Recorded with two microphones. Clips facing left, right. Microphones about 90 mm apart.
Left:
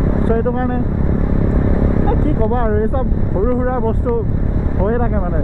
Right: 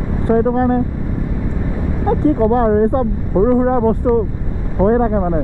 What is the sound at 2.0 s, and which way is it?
Speech, 25° right (ahead or behind).